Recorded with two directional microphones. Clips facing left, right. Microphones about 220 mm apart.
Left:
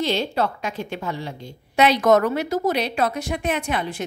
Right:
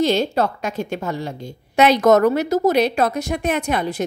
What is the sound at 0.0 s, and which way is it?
A woman's voice, 45° right (ahead or behind).